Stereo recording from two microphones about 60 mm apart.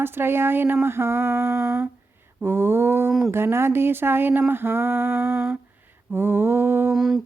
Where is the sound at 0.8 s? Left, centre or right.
Right.